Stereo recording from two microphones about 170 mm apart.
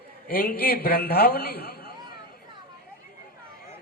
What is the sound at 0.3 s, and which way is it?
A man's voice, 60° left (ahead or behind).